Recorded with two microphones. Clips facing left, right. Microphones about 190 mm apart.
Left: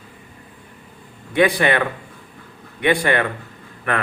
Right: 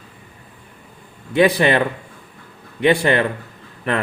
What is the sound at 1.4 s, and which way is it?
Speech, 25° right (ahead or behind).